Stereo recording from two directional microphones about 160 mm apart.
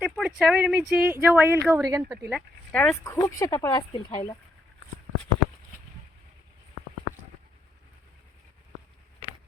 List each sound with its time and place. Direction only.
0.0 s speech: 5° right (ahead or behind)
2.3 s speech: 5° left (ahead or behind)
2.9 s speech: 20° left (ahead or behind)